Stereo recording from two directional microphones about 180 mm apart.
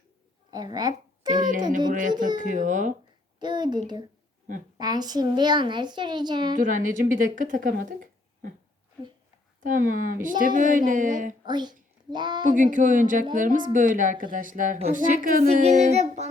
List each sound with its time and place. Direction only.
0.5 s a child's voice: 20° right (ahead or behind)
1.3 s speech: 45° right (ahead or behind)
3.4 s a woman's voice: 25° right (ahead or behind)
4.8 s a woman's voice: 20° right (ahead or behind)
6.6 s speech: 45° right (ahead or behind)
9.6 s speech: 50° right (ahead or behind)
11.4 s a woman's voice: 25° right (ahead or behind)
12.5 s speech: 45° right (ahead or behind)